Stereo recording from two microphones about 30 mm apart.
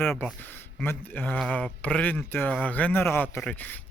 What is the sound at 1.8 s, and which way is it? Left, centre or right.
Speech, left.